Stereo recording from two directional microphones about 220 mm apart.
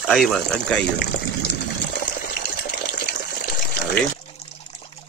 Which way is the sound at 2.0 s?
50° left (ahead or behind).